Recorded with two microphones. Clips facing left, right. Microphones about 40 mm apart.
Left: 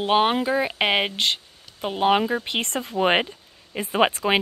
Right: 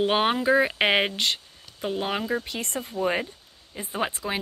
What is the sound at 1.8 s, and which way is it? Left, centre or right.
Speech, left.